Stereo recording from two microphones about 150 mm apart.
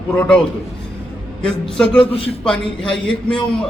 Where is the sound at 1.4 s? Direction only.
5° left (ahead or behind).